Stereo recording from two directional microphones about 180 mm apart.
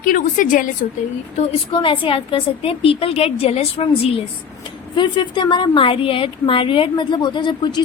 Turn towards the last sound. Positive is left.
turn(degrees=25)  # may be behind; listen again after turning